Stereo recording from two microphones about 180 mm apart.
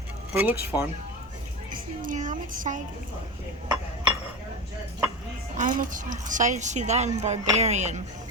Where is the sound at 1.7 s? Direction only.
45° right (ahead or behind).